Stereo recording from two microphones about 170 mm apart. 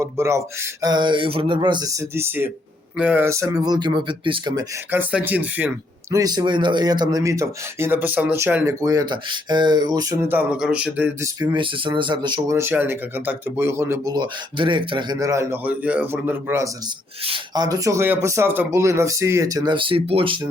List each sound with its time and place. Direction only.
0.0 s speech: 15° right (ahead or behind)
4.9 s speech: 10° right (ahead or behind)
11.3 s speech: 30° right (ahead or behind)
12.5 s speech: 15° right (ahead or behind)
17.2 s speech: 25° right (ahead or behind)